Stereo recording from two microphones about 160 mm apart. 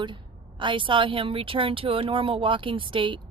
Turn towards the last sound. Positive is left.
turn(degrees=-30)  # may be behind; listen again after turning